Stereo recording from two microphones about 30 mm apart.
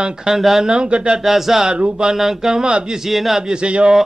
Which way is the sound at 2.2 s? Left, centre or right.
Centre.